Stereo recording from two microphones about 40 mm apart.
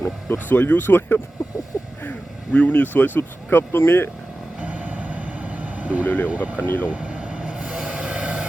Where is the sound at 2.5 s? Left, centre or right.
Left.